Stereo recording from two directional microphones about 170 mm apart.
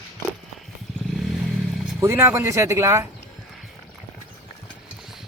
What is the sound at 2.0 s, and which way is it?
Speech, 15° right (ahead or behind).